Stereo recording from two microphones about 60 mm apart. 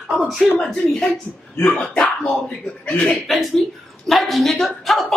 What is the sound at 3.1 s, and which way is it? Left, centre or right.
Speech, centre.